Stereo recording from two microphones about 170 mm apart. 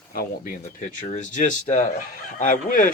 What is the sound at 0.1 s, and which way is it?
Speech, 60° left (ahead or behind).